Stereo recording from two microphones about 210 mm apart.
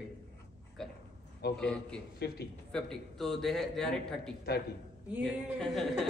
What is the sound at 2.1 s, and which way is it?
Speech, 50° left (ahead or behind).